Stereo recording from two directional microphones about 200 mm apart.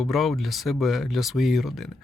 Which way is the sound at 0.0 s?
Centre (ahead or behind).